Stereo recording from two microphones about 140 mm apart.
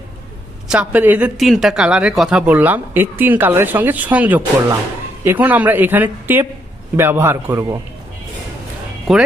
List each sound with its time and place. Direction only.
0.7 s speech: 10° right (ahead or behind)
1.4 s speech: centre (ahead or behind); by 7.8 s 15° right (ahead or behind)
9.1 s speech: centre (ahead or behind)